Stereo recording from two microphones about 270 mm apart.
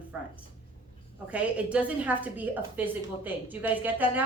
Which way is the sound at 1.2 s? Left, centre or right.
Centre.